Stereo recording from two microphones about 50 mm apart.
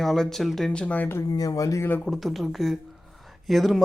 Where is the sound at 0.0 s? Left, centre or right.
Centre.